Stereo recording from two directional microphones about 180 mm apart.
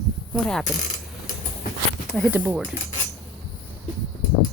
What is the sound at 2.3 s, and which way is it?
Speech, 10° right (ahead or behind).